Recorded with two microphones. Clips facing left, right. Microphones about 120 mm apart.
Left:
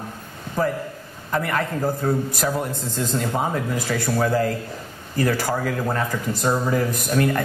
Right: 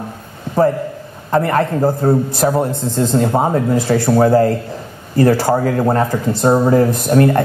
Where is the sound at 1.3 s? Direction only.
35° right (ahead or behind).